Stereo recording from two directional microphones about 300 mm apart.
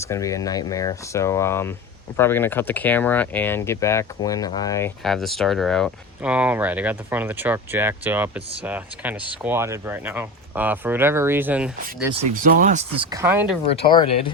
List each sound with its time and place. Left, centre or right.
0.0 s speech: centre
5.0 s speech: centre
12.2 s speech: right
13.1 s speech: centre
13.7 s speech: centre